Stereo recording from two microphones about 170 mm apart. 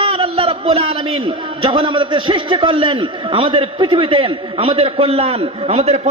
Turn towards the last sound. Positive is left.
turn(degrees=-35)  # may be behind; listen again after turning